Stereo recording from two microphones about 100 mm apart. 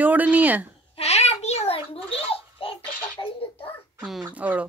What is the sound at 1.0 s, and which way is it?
A child's voice, 90° left.